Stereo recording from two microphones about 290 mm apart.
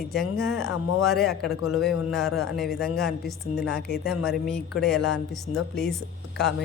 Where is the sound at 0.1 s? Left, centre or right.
Centre.